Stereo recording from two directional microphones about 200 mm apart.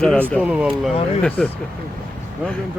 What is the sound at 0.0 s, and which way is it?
Speech, 5° left (ahead or behind).